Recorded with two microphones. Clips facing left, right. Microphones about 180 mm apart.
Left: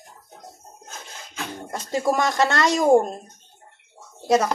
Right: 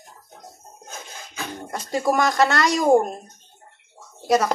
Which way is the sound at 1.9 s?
25° left (ahead or behind).